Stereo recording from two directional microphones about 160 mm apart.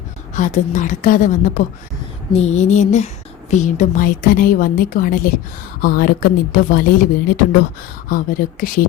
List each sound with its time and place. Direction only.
0.3 s a woman's voice: 55° left (ahead or behind)
2.3 s a woman's voice: 45° left (ahead or behind); by 8.7 s 60° left (ahead or behind)